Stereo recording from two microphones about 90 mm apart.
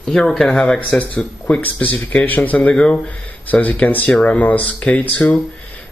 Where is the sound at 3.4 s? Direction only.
20° left (ahead or behind).